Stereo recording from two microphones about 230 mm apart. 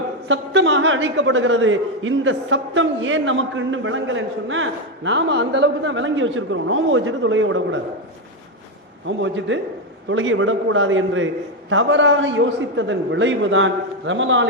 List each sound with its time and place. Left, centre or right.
0.3 s a man's voice: right
9.0 s a man's voice: right